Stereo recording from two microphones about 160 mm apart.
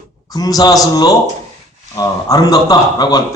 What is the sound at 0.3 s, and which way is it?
Speech, 25° left (ahead or behind).